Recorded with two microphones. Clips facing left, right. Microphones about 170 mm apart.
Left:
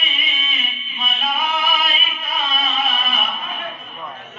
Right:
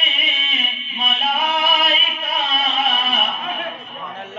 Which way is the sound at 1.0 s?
65° right (ahead or behind).